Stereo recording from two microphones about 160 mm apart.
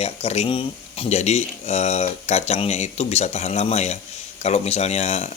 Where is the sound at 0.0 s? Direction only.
40° left (ahead or behind).